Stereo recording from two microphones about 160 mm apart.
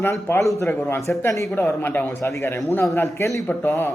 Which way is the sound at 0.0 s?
15° left (ahead or behind).